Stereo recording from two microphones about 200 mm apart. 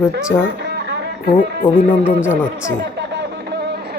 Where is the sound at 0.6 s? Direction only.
55° right (ahead or behind).